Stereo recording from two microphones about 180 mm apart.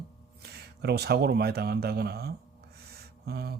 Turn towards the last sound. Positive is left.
turn(degrees=-60)  # may be behind; listen again after turning